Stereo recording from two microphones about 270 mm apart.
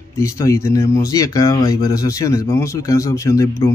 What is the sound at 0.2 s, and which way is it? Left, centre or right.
Speech, centre.